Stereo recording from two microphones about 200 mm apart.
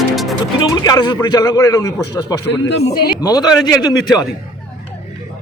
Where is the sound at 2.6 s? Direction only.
60° left (ahead or behind).